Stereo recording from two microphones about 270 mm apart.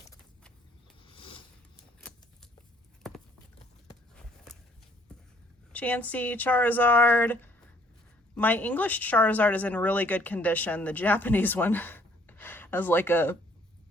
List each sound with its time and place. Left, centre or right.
1.0 s zipper: centre
2.0 s a sound: centre
5.7 s speech: centre